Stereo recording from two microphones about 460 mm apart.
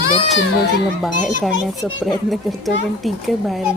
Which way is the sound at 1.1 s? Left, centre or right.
Right.